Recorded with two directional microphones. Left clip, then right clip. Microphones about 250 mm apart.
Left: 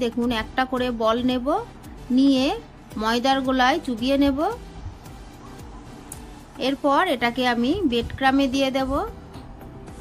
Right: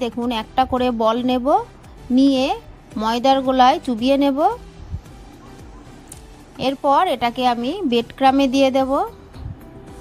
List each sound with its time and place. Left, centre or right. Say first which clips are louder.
0.0 s a woman's voice: right 1 dB; right
6.6 s a woman's voice: right 4 dB; right